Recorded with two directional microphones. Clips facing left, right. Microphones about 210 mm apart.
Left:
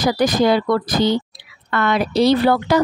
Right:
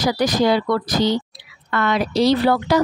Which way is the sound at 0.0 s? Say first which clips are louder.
Left 2 dB; 50° left (ahead or behind).